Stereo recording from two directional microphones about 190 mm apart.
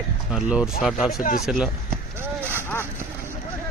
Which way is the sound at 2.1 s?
10° right (ahead or behind).